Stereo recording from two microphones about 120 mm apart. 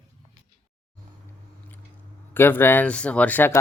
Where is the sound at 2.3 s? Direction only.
20° left (ahead or behind).